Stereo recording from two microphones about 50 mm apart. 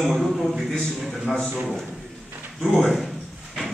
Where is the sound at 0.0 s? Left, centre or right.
Centre.